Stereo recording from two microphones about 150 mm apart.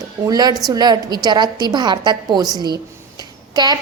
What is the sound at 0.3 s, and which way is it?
A woman's voice, 25° right (ahead or behind).